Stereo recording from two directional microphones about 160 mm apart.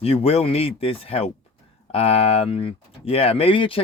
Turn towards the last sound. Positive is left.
turn(degrees=35)  # may be behind; listen again after turning